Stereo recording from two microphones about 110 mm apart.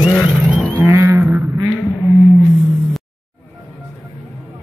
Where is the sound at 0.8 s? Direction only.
20° right (ahead or behind).